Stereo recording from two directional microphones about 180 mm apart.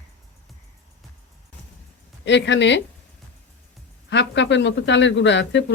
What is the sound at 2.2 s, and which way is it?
Speech, 80° left.